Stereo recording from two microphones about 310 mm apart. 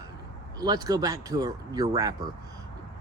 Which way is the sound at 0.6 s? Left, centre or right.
Centre.